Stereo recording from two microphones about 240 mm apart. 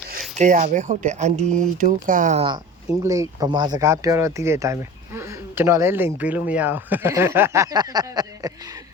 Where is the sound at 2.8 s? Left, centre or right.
Centre.